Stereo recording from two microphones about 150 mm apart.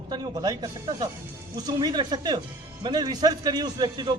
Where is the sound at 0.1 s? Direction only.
25° right (ahead or behind).